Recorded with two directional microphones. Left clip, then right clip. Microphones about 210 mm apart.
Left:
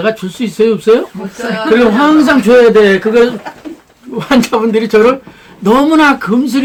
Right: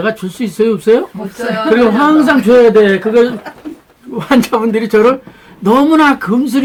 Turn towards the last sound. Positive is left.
turn(degrees=0)  # may be behind; listen again after turning